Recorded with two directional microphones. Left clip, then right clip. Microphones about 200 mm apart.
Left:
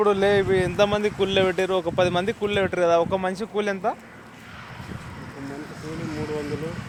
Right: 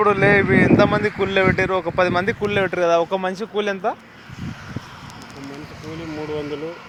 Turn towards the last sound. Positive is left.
turn(degrees=10)  # may be behind; listen again after turning